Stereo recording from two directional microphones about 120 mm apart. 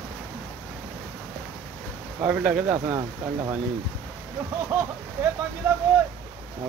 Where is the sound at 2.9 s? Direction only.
30° right (ahead or behind).